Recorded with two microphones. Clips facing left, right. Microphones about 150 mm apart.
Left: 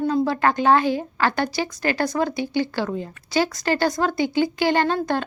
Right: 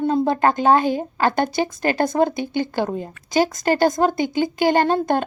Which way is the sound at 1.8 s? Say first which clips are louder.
Right 2 dB; 20° right (ahead or behind).